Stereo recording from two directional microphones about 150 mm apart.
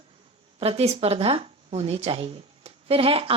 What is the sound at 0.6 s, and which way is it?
A woman's voice, 40° right (ahead or behind).